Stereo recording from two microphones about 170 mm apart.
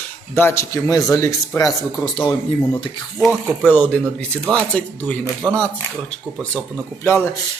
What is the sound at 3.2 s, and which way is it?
A man's voice, centre (ahead or behind).